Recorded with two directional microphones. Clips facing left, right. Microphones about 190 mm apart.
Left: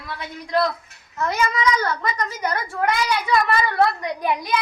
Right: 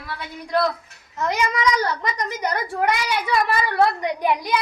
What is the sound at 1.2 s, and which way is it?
A woman's voice, 15° right (ahead or behind).